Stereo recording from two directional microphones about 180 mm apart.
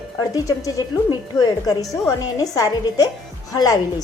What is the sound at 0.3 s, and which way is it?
A woman's voice, 20° left (ahead or behind).